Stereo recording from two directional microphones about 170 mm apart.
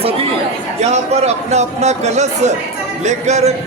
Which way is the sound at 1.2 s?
40° right (ahead or behind).